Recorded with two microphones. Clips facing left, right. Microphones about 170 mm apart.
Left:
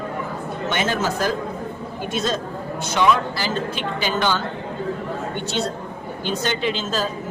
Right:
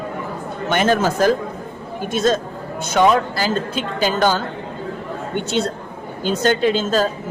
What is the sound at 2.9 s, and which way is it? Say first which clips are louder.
Speech: right 4 dB; 45° right (ahead or behind).